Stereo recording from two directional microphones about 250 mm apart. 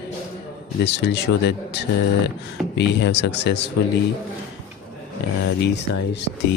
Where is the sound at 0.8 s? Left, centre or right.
Left.